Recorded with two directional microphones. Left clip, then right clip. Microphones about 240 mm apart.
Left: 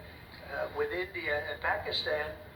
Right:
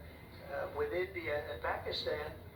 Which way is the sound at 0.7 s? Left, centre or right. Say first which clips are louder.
Left 1 dB; left.